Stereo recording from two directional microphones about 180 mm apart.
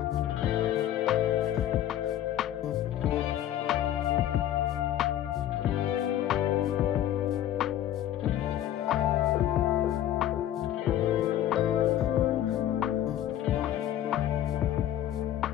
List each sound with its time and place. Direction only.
6.2 s music: centre (ahead or behind)
8.8 s music: centre (ahead or behind)